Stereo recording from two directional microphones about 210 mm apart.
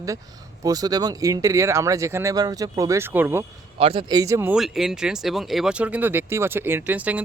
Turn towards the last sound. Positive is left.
turn(degrees=-5)  # may be behind; listen again after turning